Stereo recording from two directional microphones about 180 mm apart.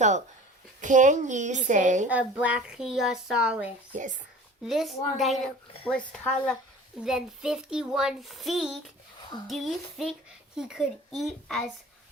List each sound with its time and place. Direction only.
0.8 s a woman's voice: 45° right (ahead or behind)
2.0 s speech: 10° right (ahead or behind)
3.9 s a woman's voice: 45° right (ahead or behind)
4.6 s speech: centre (ahead or behind)